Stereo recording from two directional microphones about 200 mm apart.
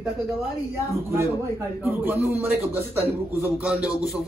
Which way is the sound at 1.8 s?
10° right (ahead or behind).